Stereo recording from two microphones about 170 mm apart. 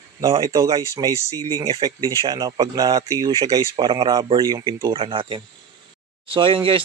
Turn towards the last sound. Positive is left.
turn(degrees=-30)  # may be behind; listen again after turning